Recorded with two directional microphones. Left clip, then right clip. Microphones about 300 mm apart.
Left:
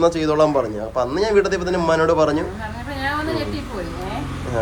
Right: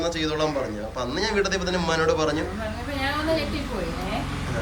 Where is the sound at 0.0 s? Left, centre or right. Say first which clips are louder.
Left 9 dB; centre.